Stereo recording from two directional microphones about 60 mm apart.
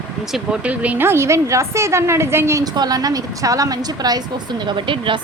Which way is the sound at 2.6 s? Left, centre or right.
Right.